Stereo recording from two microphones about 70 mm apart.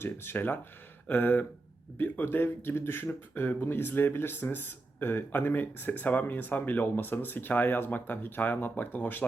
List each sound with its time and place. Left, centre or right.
0.0 s speech: left